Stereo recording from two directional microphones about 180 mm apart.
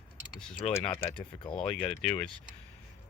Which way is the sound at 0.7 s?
15° left (ahead or behind).